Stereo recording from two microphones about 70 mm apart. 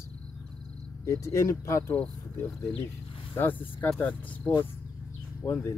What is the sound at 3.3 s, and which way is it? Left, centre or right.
Speech, left.